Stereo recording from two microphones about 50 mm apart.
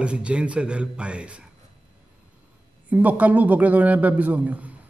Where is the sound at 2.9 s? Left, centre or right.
Right.